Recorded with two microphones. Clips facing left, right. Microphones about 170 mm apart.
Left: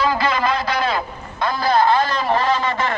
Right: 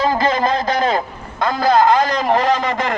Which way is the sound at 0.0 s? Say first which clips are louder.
Right 3 dB; 45° right (ahead or behind).